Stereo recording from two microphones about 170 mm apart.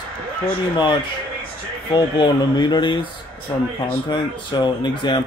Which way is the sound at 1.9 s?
25° left (ahead or behind).